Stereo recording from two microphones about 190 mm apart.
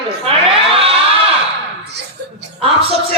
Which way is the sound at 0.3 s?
30° right (ahead or behind).